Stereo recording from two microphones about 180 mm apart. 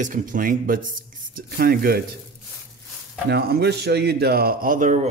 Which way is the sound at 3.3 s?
65° right (ahead or behind).